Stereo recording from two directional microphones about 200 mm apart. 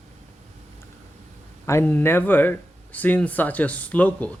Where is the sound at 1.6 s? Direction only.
10° left (ahead or behind).